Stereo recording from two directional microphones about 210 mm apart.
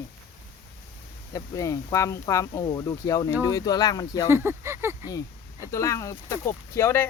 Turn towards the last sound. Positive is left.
turn(degrees=10)  # may be behind; listen again after turning